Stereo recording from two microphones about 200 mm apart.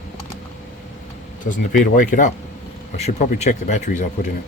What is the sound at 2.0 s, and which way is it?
Speech, 40° left (ahead or behind).